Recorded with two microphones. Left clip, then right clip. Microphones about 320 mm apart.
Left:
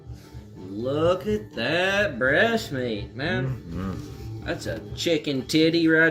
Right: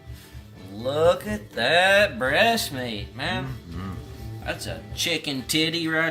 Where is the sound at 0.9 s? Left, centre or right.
Right.